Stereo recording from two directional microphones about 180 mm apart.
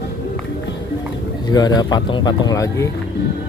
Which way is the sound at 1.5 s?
20° left (ahead or behind).